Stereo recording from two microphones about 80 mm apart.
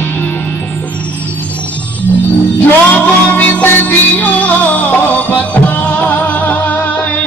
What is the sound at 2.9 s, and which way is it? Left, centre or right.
Music, centre.